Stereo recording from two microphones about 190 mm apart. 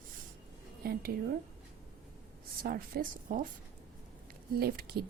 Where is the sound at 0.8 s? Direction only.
50° right (ahead or behind).